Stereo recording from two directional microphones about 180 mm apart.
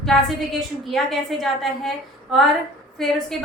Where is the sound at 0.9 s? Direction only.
Centre (ahead or behind).